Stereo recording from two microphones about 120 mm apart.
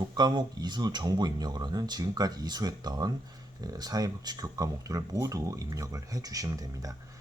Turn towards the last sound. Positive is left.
turn(degrees=-30)  # may be behind; listen again after turning